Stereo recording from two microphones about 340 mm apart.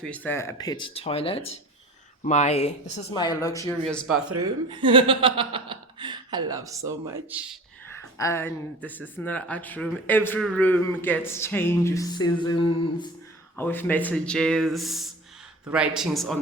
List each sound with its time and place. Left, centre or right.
0.0 s speech: centre
4.7 s speech: centre
7.9 s speech: centre